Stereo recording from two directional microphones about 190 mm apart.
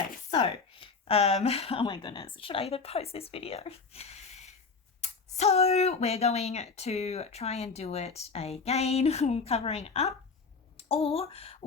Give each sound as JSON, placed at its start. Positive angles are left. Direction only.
{"t": 0.3, "sound": "speech", "side_deg": 30}